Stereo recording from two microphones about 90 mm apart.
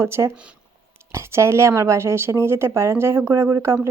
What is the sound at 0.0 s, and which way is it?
Speech, 30° right (ahead or behind).